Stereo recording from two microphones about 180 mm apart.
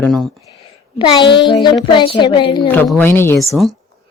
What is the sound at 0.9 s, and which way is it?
Speech, 25° left (ahead or behind).